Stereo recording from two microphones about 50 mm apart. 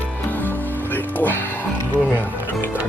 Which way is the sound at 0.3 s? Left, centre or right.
Left.